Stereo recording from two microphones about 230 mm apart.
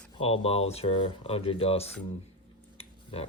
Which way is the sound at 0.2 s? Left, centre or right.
Left.